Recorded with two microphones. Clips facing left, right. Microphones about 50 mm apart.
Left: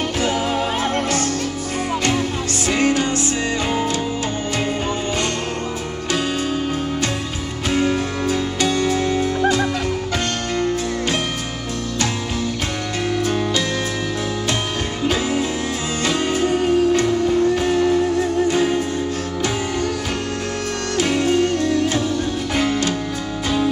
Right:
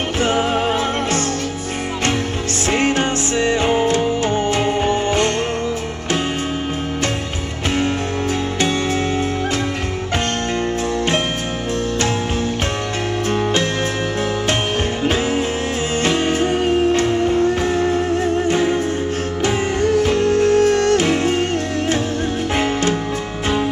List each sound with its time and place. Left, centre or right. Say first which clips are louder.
2.7 s music: right 1 dB; right
7.7 s music: left 1 dB; right
16.1 s music: even; right
19.8 s music: right 8 dB; right